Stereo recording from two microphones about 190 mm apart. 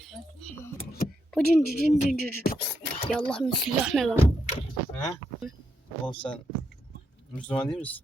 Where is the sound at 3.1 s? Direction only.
5° left (ahead or behind).